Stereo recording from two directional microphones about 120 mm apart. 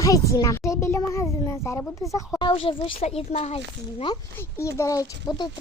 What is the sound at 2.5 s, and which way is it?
A woman's voice, 50° left (ahead or behind).